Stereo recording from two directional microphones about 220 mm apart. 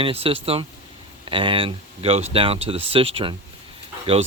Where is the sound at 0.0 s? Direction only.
25° right (ahead or behind).